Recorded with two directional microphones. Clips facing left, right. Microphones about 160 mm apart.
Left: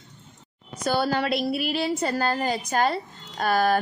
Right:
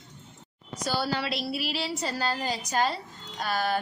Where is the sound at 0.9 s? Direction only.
55° left (ahead or behind).